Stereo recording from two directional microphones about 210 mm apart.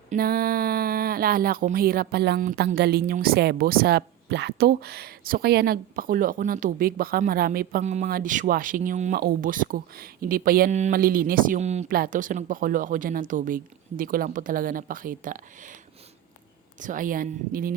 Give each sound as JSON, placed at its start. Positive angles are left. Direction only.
{"t": 0.1, "sound": "speech", "side_deg": -45}
{"t": 16.8, "sound": "speech", "side_deg": -40}